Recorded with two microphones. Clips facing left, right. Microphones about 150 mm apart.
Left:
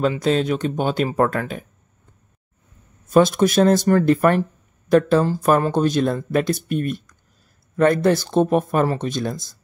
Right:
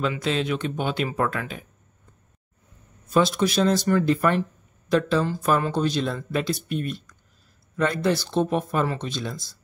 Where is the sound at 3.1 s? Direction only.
50° left (ahead or behind).